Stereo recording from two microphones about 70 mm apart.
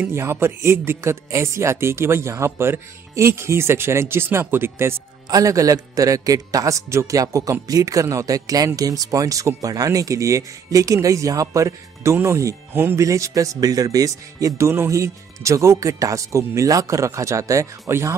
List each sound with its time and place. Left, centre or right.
0.1 s speech: right
5.3 s a man's voice: right
14.7 s speech: right